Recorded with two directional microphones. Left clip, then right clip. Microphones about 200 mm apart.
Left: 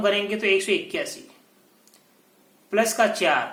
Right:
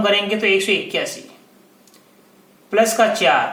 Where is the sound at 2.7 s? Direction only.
35° left (ahead or behind).